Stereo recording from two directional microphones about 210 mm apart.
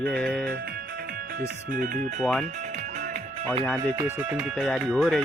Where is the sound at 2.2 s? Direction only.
Centre (ahead or behind).